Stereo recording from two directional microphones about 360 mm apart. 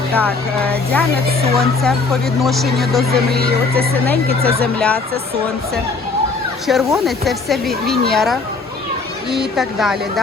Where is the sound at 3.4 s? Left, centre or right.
Right.